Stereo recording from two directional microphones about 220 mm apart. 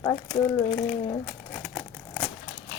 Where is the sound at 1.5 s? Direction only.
5° left (ahead or behind).